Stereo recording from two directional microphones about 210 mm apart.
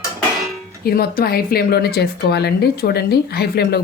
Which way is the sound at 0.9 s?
45° left (ahead or behind).